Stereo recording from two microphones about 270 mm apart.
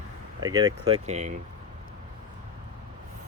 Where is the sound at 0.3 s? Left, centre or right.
Centre.